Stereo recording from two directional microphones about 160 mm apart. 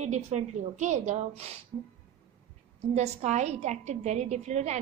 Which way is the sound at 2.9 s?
45° right (ahead or behind).